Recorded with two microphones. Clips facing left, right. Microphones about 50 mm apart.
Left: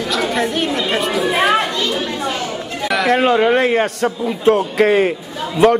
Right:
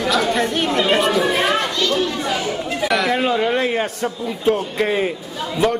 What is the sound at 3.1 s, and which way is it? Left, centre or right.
Speech, left.